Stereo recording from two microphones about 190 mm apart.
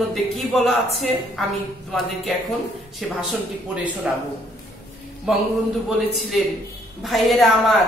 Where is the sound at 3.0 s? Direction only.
Centre (ahead or behind).